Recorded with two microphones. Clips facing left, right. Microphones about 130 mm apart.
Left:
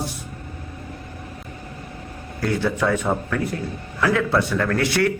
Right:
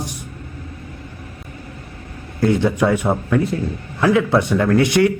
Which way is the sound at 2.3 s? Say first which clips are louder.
Right 6 dB; 20° right (ahead or behind).